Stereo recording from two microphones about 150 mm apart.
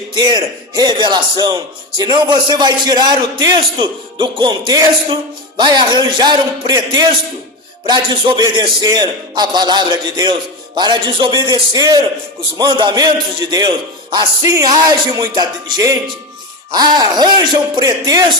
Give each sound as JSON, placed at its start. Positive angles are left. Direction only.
{"t": 0.1, "sound": "a man's voice", "side_deg": -30}